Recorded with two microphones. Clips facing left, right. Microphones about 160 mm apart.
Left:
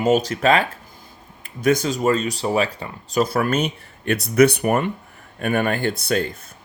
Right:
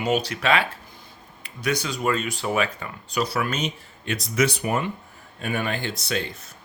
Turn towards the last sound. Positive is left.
turn(degrees=50)  # may be behind; listen again after turning